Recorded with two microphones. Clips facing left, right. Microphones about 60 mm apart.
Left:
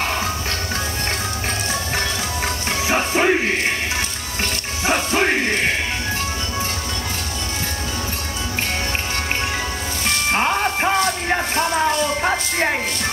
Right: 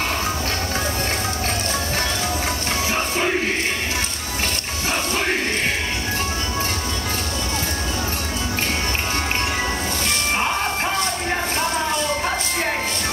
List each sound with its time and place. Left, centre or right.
2.9 s music: left
4.8 s music: left
10.3 s music: left
12.2 s a sound: left